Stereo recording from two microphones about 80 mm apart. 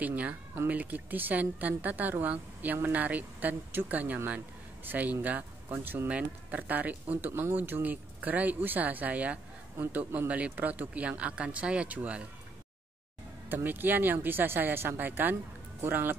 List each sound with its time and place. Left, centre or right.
0.0 s speech: centre
13.5 s speech: right